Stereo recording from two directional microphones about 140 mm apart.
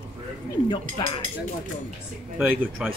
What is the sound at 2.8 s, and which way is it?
Speech, 5° right (ahead or behind).